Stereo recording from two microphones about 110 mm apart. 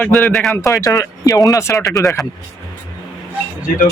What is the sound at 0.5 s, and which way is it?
Speech, 30° left (ahead or behind).